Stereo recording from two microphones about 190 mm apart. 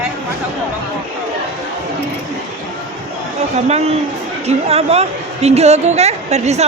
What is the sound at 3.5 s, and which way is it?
A man's voice, 35° right (ahead or behind).